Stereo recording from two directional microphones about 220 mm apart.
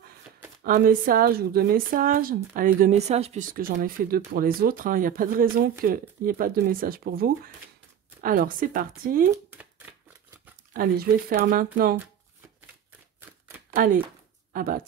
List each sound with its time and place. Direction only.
0.7 s a woman's voice: 40° right (ahead or behind)
10.7 s a woman's voice: 40° right (ahead or behind)
13.7 s a woman's voice: 40° right (ahead or behind)